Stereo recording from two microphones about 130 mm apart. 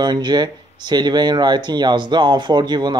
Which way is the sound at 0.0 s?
35° right (ahead or behind).